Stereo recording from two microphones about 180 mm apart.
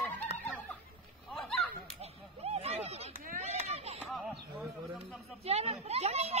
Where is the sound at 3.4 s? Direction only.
35° right (ahead or behind).